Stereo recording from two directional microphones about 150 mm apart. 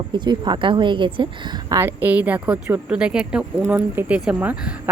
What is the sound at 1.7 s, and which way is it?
Speech, 15° right (ahead or behind).